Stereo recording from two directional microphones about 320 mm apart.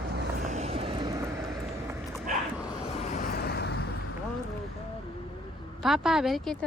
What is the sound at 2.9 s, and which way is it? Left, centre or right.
Vehicle, left.